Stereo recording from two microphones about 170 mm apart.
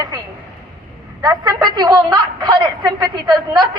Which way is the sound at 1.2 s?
25° right (ahead or behind).